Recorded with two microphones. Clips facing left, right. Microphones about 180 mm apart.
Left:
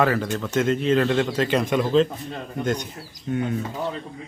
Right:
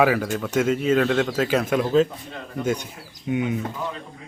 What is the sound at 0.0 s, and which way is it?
Speech, 10° right (ahead or behind).